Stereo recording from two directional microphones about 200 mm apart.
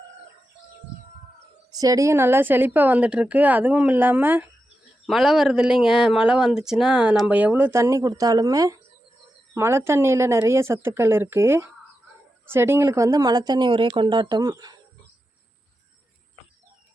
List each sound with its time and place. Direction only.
1.8 s a woman's voice: 15° right (ahead or behind)